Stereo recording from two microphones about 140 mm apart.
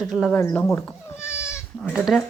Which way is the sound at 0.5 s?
10° left (ahead or behind).